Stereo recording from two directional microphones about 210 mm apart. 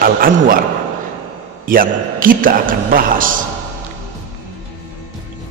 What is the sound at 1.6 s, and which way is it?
A man's voice, 40° right (ahead or behind).